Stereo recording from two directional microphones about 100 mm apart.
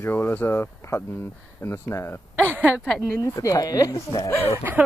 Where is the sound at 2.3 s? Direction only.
20° right (ahead or behind).